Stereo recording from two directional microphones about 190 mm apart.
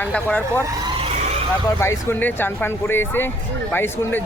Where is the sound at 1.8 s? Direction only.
15° left (ahead or behind).